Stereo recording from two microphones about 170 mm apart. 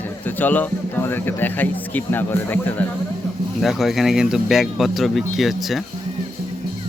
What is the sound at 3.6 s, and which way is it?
Speech, centre (ahead or behind).